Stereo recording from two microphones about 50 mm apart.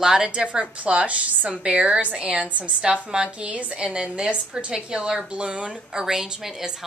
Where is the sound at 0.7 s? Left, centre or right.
Right.